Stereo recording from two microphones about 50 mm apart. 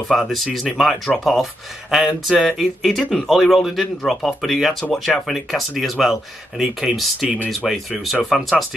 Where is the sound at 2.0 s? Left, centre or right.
Centre.